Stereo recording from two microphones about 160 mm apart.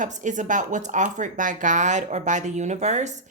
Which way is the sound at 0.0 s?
50° right (ahead or behind).